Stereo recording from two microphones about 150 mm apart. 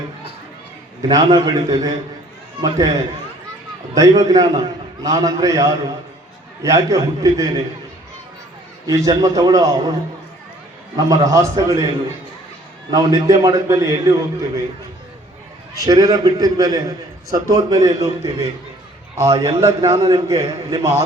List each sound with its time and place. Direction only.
1.0 s a man's voice: 25° right (ahead or behind)
8.9 s a man's voice: 25° right (ahead or behind)
10.9 s a man's voice: 25° right (ahead or behind)
12.9 s a man's voice: 25° right (ahead or behind)
15.7 s a man's voice: 25° right (ahead or behind)